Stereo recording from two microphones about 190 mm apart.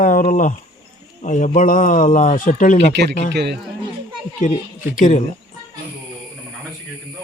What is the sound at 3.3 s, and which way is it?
Speech, 60° right (ahead or behind).